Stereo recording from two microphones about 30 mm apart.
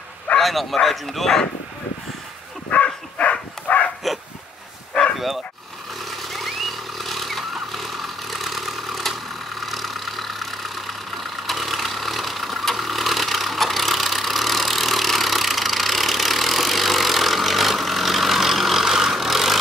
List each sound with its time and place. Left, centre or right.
0.4 s speech: centre
2.8 s dog: left
6.0 s vehicle: centre